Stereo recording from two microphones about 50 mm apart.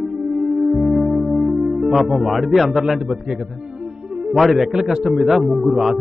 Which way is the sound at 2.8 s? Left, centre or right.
Centre.